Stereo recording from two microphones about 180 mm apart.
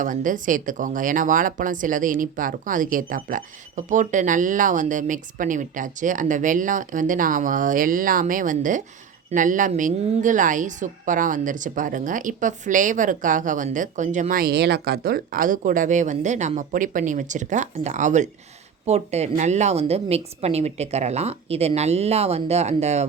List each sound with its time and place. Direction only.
0.0 s a woman's voice: 45° right (ahead or behind)